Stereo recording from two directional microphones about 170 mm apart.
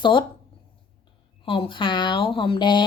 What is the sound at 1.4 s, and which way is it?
A woman's voice, 30° left (ahead or behind).